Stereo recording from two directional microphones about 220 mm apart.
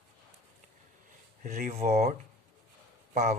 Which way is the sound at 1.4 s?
40° right (ahead or behind).